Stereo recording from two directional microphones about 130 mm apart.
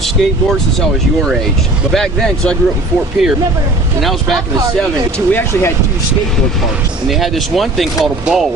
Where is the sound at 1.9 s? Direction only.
5° left (ahead or behind).